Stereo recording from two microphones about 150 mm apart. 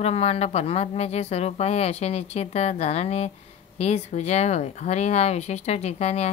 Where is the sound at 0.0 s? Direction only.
45° left (ahead or behind).